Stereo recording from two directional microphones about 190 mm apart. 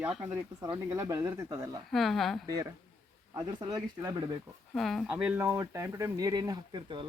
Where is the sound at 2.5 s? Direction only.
20° right (ahead or behind).